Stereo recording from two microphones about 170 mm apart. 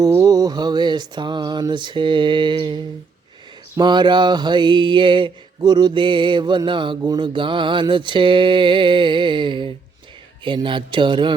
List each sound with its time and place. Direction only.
0.0 s mantra: 20° right (ahead or behind)